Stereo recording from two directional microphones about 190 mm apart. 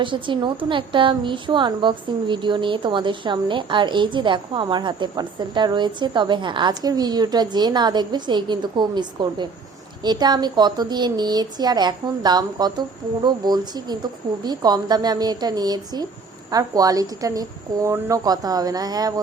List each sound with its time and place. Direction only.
0.0 s a woman's voice: 25° right (ahead or behind)